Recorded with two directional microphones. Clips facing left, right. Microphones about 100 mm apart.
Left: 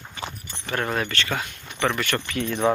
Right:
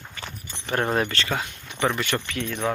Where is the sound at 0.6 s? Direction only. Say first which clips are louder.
Right 2 dB; 25° right (ahead or behind).